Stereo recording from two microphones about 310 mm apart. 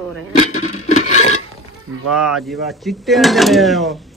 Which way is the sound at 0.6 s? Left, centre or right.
Left.